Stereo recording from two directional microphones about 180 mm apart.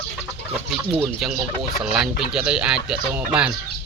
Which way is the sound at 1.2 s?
Centre (ahead or behind).